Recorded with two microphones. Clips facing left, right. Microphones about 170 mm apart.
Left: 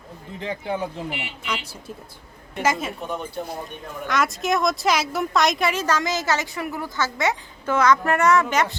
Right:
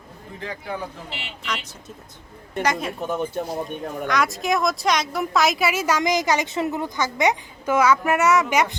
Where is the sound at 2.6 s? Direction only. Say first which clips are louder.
Even; centre (ahead or behind).